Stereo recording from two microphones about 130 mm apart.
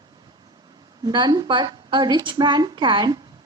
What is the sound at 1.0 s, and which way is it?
A woman's voice, 35° right (ahead or behind).